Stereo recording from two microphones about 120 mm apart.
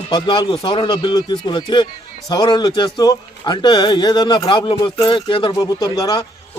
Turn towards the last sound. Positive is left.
turn(degrees=35)  # may be behind; listen again after turning